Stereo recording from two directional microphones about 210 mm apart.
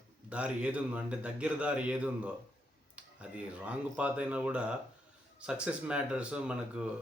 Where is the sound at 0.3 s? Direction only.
5° right (ahead or behind).